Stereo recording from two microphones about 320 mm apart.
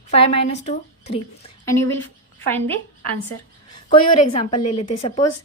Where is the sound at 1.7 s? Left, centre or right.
Centre.